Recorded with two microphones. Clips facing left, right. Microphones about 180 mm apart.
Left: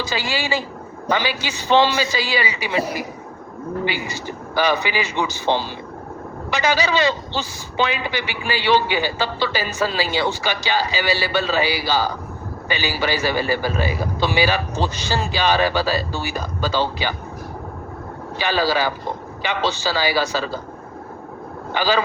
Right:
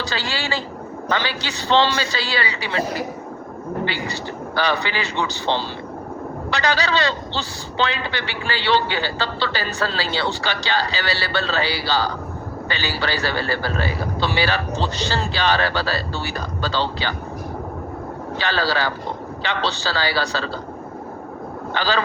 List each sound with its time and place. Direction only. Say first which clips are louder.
0.0 s a man's voice: left 2 dB; 15° left (ahead or behind)
18.3 s a man's voice: left 3 dB; 15° left (ahead or behind)
21.7 s a man's voice: left 2 dB; 15° left (ahead or behind)